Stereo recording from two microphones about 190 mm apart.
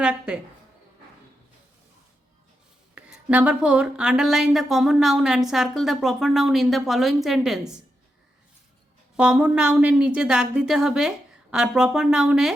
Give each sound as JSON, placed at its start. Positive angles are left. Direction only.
{"t": 0.0, "sound": "a woman's voice", "side_deg": -5}
{"t": 2.9, "sound": "speech", "side_deg": -5}
{"t": 9.1, "sound": "speech", "side_deg": -5}